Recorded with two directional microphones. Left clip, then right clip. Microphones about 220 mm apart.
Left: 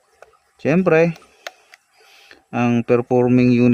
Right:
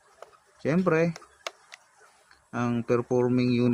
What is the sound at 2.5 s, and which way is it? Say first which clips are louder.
Speech: left 9 dB; 45° left (ahead or behind).